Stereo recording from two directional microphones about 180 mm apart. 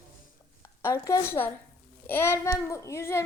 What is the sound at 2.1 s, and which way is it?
Child singing, 15° left (ahead or behind).